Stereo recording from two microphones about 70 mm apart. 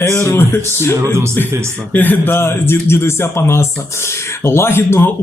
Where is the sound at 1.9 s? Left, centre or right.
Left.